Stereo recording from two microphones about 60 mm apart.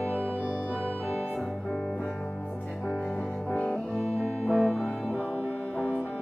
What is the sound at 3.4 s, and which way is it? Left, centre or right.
Music, left.